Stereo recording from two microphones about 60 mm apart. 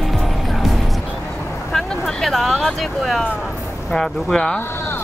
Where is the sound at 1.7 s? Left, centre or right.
Centre.